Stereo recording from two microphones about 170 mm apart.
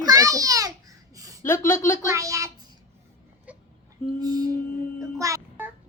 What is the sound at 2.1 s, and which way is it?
Speech, 20° right (ahead or behind).